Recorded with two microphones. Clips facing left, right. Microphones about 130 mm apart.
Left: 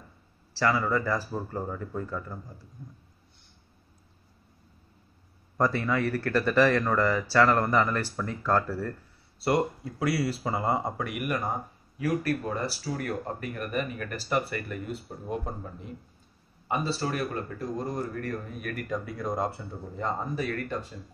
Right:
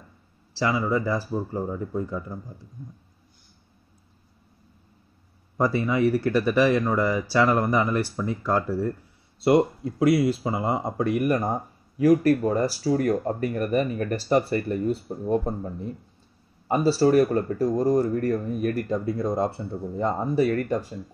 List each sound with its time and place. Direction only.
0.6 s speech: 15° right (ahead or behind)
5.6 s speech: 10° right (ahead or behind)
11.0 s speech: 30° right (ahead or behind)